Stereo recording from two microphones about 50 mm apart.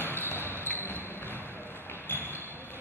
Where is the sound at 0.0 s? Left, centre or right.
Left.